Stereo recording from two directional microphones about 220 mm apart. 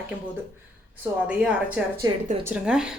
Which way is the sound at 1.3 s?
5° right (ahead or behind).